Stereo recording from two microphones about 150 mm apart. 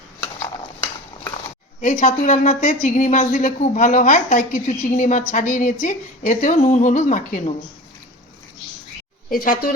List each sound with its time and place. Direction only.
0.3 s a sound: 15° left (ahead or behind)
1.8 s a woman's voice: 60° left (ahead or behind)
9.3 s speech: 70° left (ahead or behind)